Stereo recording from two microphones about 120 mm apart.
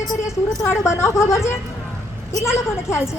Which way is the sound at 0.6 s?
25° left (ahead or behind).